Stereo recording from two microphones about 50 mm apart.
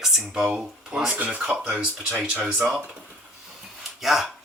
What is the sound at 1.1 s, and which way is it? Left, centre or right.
Speech, right.